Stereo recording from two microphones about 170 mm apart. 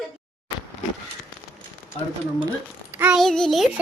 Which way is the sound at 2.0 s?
35° left (ahead or behind).